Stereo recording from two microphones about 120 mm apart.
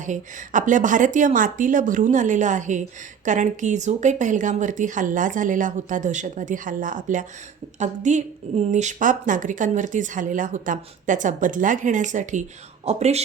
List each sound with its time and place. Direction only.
0.0 s a woman's voice: 90° right; by 13.2 s 65° right (ahead or behind)